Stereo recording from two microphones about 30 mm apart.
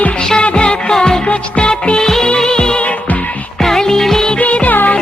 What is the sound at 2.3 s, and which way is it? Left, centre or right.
Music, left.